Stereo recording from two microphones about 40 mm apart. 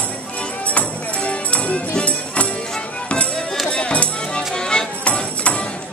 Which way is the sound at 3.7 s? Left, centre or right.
Left.